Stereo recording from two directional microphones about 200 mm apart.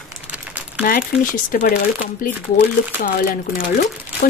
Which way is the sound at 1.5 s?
45° left (ahead or behind).